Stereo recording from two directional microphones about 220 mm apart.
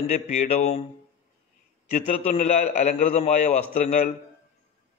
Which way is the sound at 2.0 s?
30° left (ahead or behind).